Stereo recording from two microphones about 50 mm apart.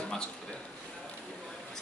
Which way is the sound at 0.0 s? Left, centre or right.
Centre.